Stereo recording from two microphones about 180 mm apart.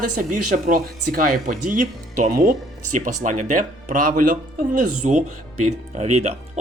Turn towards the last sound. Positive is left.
turn(degrees=-35)  # may be behind; listen again after turning